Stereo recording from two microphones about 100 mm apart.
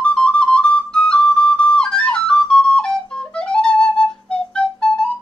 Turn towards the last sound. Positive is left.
turn(degrees=10)  # may be behind; listen again after turning